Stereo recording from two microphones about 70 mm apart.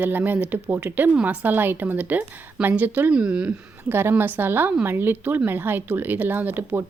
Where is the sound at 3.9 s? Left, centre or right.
Right.